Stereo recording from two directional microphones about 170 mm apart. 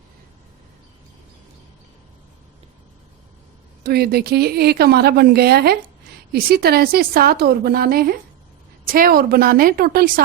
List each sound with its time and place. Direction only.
3.8 s a woman's voice: 65° right (ahead or behind)